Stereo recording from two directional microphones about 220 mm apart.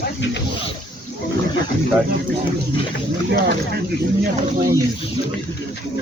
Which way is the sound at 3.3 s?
45° right (ahead or behind).